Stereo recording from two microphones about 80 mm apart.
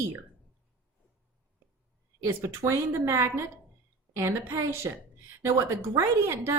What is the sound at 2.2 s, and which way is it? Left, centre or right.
Speech, right.